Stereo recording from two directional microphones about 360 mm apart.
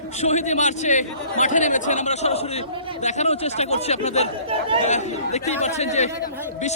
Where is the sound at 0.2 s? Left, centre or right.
Centre.